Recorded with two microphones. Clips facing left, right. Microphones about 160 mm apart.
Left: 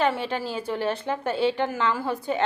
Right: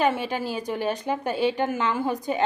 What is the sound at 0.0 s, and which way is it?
A woman's voice, 15° right (ahead or behind).